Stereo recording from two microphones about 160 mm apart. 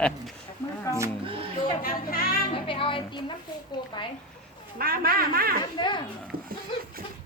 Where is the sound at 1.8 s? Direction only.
65° left (ahead or behind).